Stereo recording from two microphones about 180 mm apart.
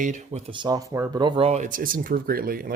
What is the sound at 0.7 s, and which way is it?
Speech, 20° right (ahead or behind).